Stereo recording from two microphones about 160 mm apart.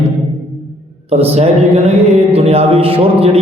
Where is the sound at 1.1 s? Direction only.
40° right (ahead or behind).